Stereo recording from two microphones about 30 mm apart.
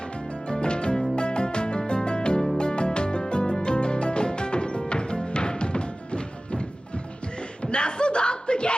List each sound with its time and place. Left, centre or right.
0.3 s music: left